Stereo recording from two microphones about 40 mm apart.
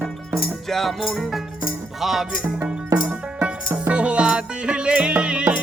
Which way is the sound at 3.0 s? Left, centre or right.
Right.